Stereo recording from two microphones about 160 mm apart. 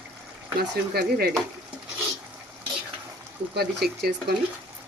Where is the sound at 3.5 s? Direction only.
90° right.